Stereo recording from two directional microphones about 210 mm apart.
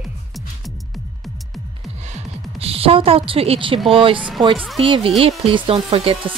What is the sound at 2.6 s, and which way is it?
A woman's voice, 25° right (ahead or behind).